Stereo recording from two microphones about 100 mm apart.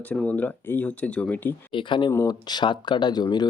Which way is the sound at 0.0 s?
15° left (ahead or behind).